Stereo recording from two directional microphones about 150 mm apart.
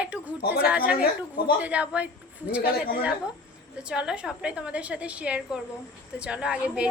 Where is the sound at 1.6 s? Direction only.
10° right (ahead or behind).